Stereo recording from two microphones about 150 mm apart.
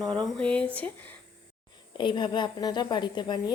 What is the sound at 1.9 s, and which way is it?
Speech, 30° left (ahead or behind).